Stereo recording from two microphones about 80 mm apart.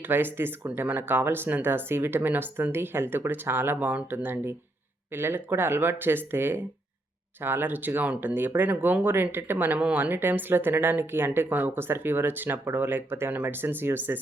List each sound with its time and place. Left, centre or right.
0.1 s speech: right